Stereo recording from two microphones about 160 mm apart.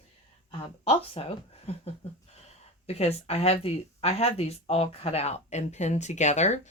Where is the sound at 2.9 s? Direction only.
40° left (ahead or behind).